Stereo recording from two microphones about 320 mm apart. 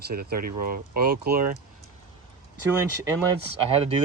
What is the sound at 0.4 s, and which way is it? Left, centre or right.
Speech, right.